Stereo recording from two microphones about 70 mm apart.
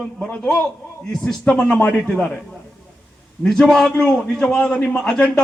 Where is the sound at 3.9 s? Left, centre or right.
Centre.